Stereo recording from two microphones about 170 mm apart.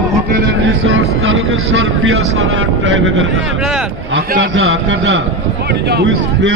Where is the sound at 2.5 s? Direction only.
90° right.